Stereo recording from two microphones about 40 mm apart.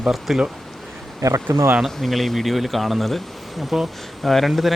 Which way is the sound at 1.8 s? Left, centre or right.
Centre.